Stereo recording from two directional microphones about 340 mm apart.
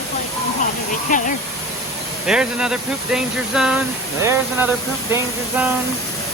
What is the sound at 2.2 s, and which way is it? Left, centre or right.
Speech, centre.